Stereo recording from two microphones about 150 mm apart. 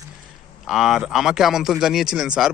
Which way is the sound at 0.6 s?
5° right (ahead or behind).